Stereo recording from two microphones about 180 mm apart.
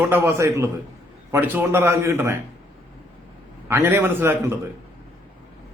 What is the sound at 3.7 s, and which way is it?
Speech, 15° right (ahead or behind).